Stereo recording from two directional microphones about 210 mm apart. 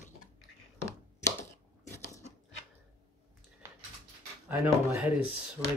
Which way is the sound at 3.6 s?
15° right (ahead or behind).